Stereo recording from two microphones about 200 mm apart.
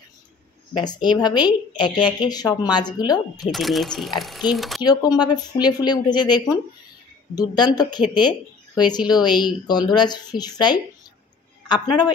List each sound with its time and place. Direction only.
0.7 s speech: 20° left (ahead or behind)
3.5 s speech: centre (ahead or behind)
4.8 s a woman's voice: 20° left (ahead or behind)